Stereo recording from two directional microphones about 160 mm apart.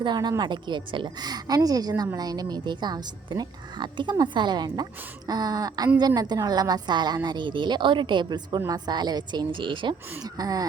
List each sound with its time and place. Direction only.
0.0 s a woman's voice: 25° right (ahead or behind)